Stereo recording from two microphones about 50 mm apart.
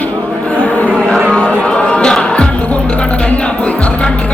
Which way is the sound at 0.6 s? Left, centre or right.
Left.